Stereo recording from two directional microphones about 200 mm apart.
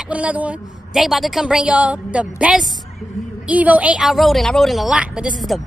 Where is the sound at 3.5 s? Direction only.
5° right (ahead or behind).